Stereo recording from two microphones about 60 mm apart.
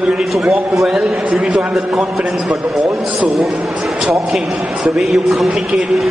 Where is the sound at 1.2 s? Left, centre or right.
Right.